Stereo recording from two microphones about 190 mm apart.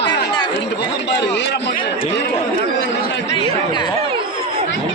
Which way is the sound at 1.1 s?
65° left (ahead or behind).